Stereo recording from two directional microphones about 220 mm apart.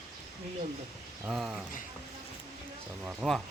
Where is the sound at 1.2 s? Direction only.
Centre (ahead or behind).